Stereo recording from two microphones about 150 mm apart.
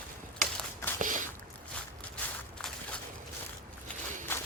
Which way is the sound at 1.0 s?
60° right (ahead or behind).